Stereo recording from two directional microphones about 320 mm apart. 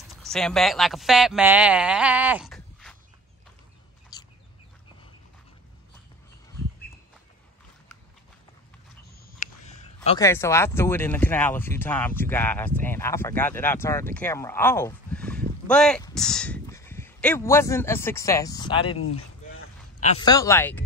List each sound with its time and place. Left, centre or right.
0.1 s speech: centre
4.1 s bird: centre
9.4 s a sound: left
10.0 s speech: centre
19.1 s a sound: left
20.1 s speech: centre